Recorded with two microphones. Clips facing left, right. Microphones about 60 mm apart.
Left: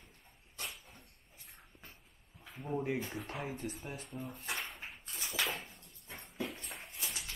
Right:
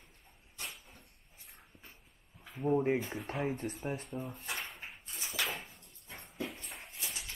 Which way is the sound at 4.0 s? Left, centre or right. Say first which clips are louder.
Right 3 dB; centre.